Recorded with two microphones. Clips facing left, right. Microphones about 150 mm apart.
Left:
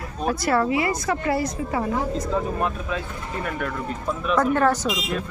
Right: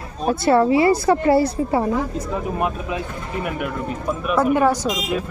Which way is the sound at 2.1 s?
15° right (ahead or behind).